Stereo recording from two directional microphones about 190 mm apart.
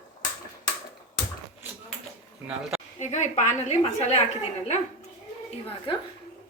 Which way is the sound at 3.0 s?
40° left (ahead or behind).